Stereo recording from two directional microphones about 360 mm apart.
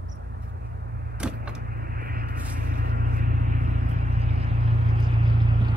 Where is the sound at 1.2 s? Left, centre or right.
Centre.